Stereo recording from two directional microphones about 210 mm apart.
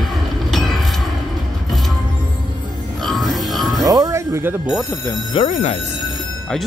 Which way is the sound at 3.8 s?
15° right (ahead or behind).